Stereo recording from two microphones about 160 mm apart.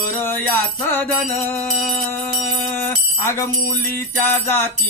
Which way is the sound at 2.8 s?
15° left (ahead or behind).